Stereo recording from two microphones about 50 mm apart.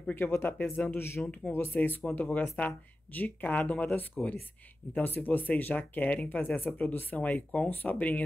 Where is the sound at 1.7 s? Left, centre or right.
Left.